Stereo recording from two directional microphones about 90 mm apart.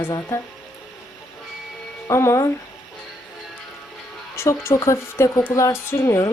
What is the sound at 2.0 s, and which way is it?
Speech, 30° left (ahead or behind).